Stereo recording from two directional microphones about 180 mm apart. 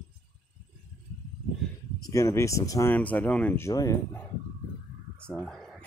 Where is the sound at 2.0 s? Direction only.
15° left (ahead or behind).